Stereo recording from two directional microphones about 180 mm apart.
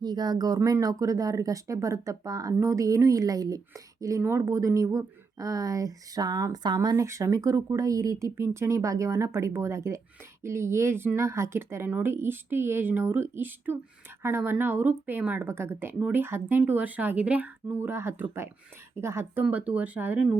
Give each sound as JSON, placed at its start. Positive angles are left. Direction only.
{"t": 0.0, "sound": "speech", "side_deg": -25}